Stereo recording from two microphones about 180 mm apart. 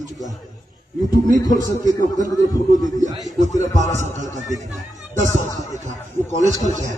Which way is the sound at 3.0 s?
40° right (ahead or behind).